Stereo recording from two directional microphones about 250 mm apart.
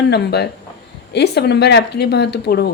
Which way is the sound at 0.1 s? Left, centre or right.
Left.